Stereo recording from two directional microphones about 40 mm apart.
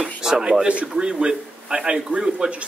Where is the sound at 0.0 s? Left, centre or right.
Centre.